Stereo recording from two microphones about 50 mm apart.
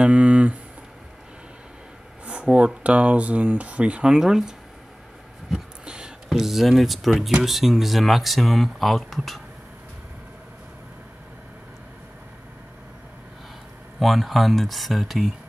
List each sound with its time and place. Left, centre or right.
0.0 s speech: right
2.4 s speech: right; by 9.4 s centre
13.9 s speech: centre